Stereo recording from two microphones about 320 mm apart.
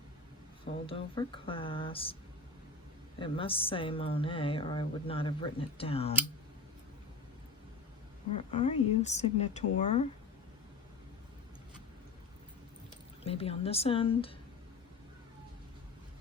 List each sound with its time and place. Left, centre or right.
0.9 s a woman's voice: centre
3.2 s a woman's voice: centre
8.4 s speech: centre
13.2 s a woman's voice: centre